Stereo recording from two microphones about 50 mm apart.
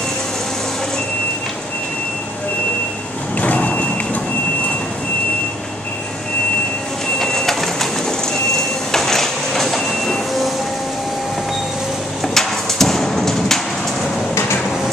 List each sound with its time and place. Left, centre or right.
3.3 s vehicle: left
7.2 s bird: centre
9.8 s train: centre
12.4 s hammer: centre